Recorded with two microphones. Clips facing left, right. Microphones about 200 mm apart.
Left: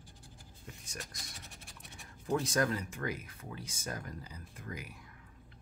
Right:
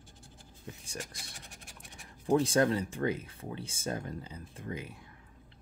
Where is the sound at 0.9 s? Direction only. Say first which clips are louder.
Right 5 dB; 10° right (ahead or behind).